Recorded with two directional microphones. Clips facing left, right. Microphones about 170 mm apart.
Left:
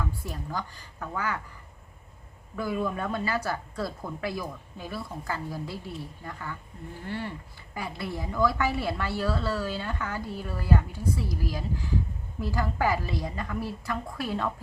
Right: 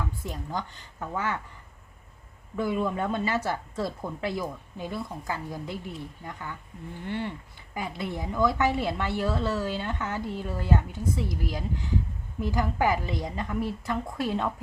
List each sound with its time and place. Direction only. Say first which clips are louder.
0.0 s a woman's voice: even; 20° right (ahead or behind)
2.6 s a woman's voice: right 2 dB; 20° right (ahead or behind)